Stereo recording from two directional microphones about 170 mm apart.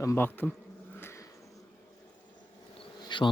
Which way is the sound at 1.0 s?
15° left (ahead or behind).